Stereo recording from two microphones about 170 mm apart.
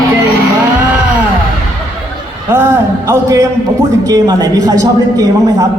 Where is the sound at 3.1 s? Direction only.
20° right (ahead or behind).